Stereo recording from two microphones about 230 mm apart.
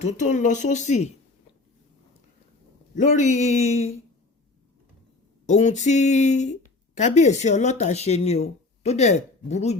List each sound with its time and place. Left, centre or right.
0.0 s speech: left
2.9 s a man's voice: left
5.5 s speech: left